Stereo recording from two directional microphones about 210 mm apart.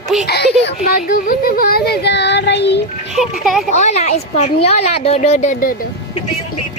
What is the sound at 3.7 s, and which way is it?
A woman's voice, 35° left (ahead or behind).